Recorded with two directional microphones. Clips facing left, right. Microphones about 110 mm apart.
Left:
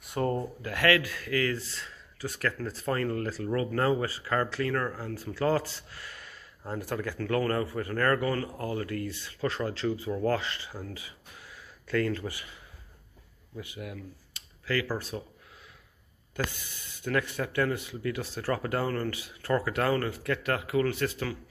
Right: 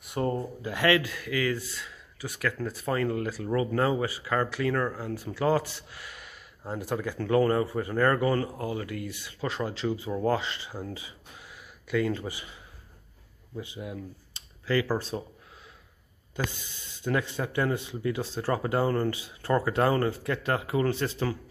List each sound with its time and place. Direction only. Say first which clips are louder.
0.1 s speech: even; 15° right (ahead or behind)
13.6 s speech: right 3 dB; 25° right (ahead or behind)
16.4 s speech: right 2 dB; 25° right (ahead or behind)